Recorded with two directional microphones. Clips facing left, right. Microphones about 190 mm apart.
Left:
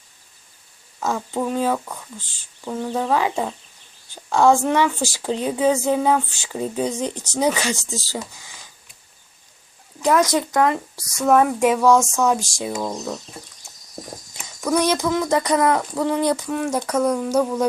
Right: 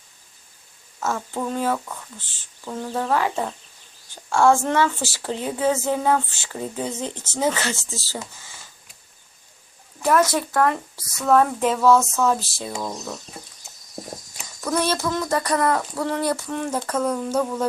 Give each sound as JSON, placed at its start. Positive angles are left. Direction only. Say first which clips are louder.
{"t": 0.9, "sound": "a woman's voice", "louder": "left 3 dB", "side_deg": 15}
{"t": 10.0, "sound": "a woman's voice", "louder": "left 1 dB", "side_deg": 15}
{"t": 14.6, "sound": "a woman's voice", "louder": "left 3 dB", "side_deg": 15}